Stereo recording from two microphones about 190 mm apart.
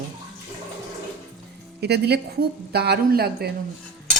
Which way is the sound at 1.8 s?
60° right (ahead or behind).